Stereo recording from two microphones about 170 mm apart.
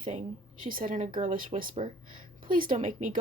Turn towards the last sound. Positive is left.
turn(degrees=-50)  # may be behind; listen again after turning